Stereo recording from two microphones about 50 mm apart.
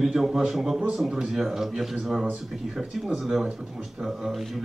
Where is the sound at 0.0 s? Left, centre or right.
Centre.